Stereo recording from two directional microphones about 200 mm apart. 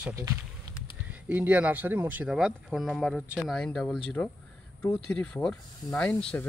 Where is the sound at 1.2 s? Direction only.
10° right (ahead or behind).